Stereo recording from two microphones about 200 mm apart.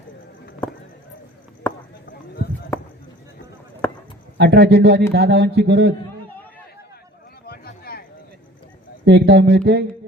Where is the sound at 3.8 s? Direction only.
10° left (ahead or behind).